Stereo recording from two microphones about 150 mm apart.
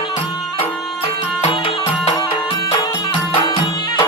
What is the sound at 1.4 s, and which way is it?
Music, 40° left (ahead or behind).